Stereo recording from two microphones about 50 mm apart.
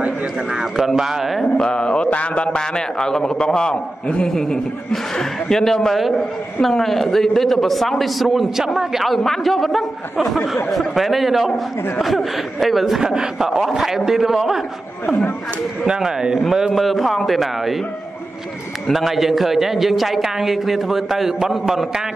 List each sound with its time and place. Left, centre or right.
0.5 s a man's voice: centre
1.4 s a man's voice: centre
9.1 s a man's voice: centre
13.0 s a man's voice: centre
15.9 s a man's voice: centre
16.7 s a man's voice: centre
18.9 s a man's voice: centre